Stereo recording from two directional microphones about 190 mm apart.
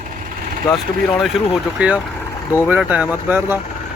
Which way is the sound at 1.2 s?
Centre (ahead or behind).